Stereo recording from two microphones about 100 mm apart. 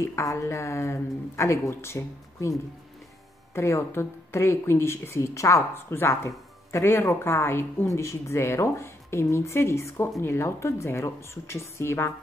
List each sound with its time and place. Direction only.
0.0 s speech: 30° left (ahead or behind)
3.5 s speech: 30° left (ahead or behind)